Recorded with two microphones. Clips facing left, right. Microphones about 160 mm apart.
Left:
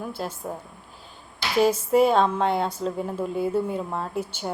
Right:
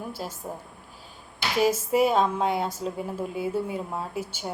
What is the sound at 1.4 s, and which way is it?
Speech, 5° right (ahead or behind).